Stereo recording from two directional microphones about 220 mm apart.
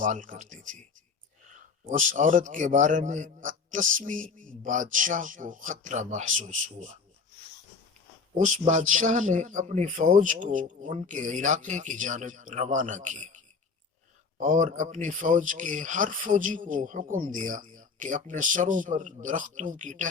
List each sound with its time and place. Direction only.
0.0 s speech: 35° right (ahead or behind)
1.9 s speech: 35° right (ahead or behind)
8.4 s speech: 35° right (ahead or behind)